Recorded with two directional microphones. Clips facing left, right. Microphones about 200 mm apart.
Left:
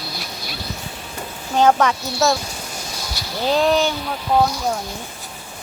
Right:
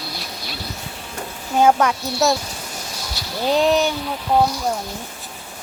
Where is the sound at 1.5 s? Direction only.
10° right (ahead or behind).